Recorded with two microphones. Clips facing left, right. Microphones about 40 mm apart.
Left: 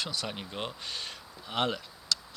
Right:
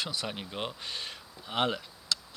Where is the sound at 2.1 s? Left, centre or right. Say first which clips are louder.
Left 1 dB; right.